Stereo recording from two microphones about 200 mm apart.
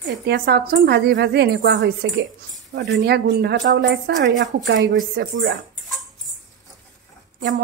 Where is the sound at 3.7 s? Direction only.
65° right (ahead or behind).